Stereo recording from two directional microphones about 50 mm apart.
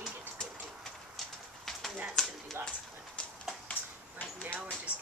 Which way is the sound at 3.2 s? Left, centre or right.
Left.